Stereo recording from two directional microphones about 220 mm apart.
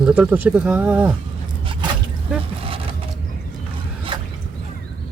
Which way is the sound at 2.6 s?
25° right (ahead or behind).